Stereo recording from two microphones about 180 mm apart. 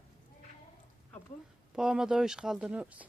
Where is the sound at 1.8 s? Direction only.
5° right (ahead or behind).